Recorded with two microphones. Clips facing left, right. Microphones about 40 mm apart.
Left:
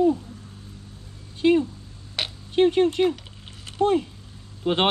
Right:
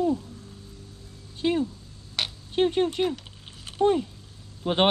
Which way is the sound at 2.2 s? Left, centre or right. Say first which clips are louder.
Left 1 dB; centre.